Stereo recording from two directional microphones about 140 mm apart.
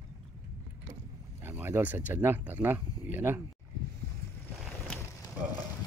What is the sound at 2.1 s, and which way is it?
Speech, 15° right (ahead or behind).